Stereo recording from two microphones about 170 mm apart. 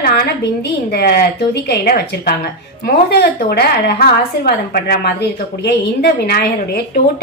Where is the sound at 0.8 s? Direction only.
60° left (ahead or behind).